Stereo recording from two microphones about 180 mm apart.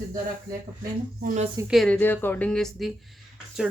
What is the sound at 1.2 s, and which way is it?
Speech, 45° right (ahead or behind).